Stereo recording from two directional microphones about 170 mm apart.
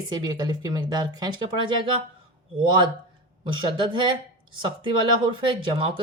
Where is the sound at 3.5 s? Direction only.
30° right (ahead or behind).